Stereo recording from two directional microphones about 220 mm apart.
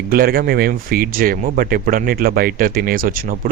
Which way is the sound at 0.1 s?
40° right (ahead or behind).